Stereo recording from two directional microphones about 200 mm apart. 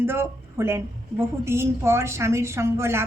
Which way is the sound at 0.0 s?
10° right (ahead or behind).